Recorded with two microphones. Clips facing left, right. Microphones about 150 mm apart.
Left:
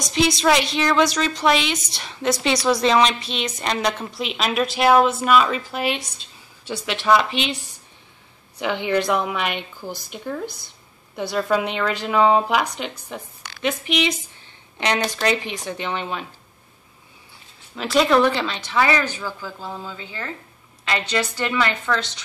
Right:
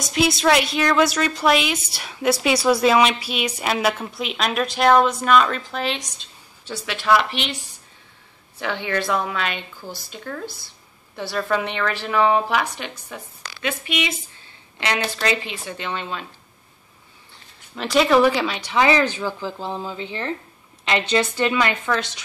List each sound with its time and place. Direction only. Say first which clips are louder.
0.0 s a woman's voice: even; 5° right (ahead or behind)
6.7 s speech: left 1 dB; 20° left (ahead or behind)
8.5 s a woman's voice: left 3 dB; 15° left (ahead or behind)
14.8 s a woman's voice: left 2 dB; 15° left (ahead or behind)
17.7 s speech: right 1 dB; centre (ahead or behind)